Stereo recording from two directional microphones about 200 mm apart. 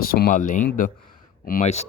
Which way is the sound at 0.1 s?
45° left (ahead or behind).